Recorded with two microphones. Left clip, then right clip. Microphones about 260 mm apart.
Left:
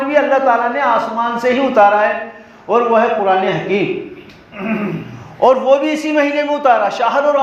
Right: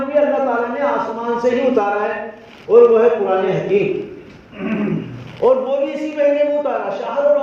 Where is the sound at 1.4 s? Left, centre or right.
Left.